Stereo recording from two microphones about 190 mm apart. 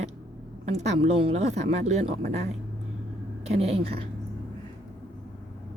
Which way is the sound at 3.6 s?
30° right (ahead or behind).